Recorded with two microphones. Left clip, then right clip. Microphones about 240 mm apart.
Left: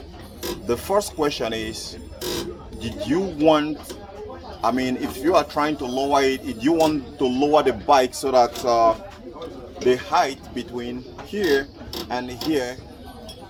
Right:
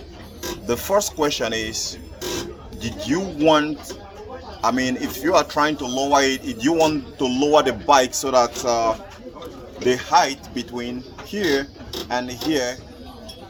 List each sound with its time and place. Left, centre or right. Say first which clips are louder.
0.7 s a man's voice: right 2 dB; centre
9.8 s speech: right 2 dB; right